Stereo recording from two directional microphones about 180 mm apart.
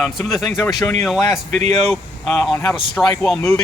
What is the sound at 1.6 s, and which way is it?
Speech, 35° right (ahead or behind).